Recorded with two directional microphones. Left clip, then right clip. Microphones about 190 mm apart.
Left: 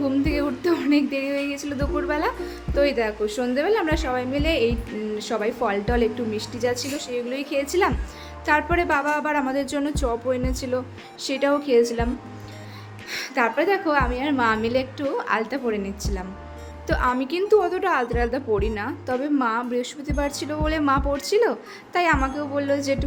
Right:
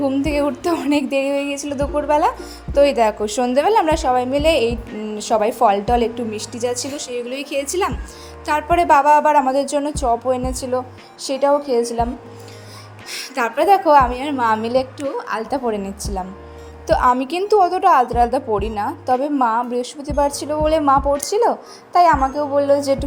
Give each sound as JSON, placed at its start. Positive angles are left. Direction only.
{"t": 0.0, "sound": "speech", "side_deg": -15}
{"t": 13.1, "sound": "a woman's voice", "side_deg": -20}